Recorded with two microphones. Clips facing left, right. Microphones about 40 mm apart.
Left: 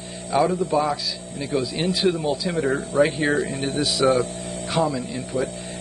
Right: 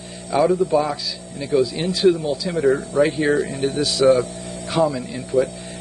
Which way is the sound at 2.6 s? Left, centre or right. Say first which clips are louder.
Right 5 dB; left.